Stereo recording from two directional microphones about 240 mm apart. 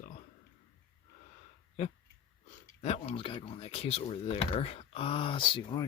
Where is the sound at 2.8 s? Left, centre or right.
Left.